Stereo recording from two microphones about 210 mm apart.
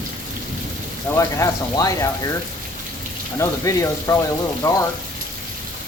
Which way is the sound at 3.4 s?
15° left (ahead or behind).